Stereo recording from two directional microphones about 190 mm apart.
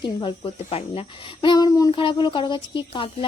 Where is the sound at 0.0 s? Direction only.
25° left (ahead or behind).